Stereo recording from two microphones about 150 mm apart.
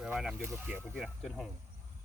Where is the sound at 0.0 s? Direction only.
5° right (ahead or behind).